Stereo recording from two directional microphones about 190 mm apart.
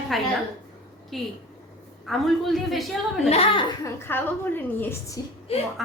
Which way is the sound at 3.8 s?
10° left (ahead or behind).